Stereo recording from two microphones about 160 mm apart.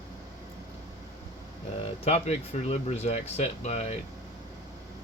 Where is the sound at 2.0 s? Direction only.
40° left (ahead or behind).